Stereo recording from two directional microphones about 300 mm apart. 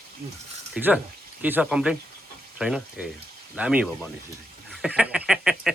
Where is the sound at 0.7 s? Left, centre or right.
Centre.